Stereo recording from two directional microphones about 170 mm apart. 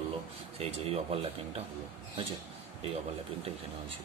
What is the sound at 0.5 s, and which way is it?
Speech, 35° right (ahead or behind).